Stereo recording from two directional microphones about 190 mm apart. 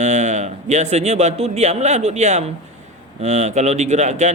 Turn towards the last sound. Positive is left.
turn(degrees=-40)  # may be behind; listen again after turning